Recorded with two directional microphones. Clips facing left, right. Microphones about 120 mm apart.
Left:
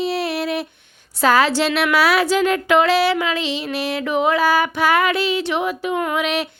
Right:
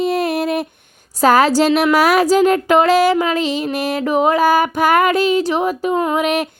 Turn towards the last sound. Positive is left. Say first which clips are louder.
# right 4 dB
turn(degrees=-45)  # may be behind; listen again after turning